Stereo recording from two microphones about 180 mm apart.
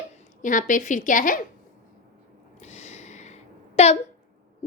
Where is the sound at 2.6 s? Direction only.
40° left (ahead or behind).